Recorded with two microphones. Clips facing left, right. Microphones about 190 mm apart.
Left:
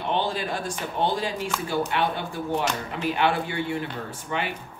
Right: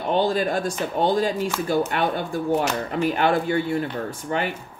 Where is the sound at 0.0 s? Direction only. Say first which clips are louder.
Right 6 dB; 45° right (ahead or behind).